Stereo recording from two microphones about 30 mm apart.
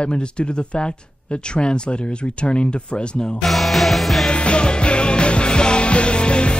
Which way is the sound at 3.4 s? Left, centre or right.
Centre.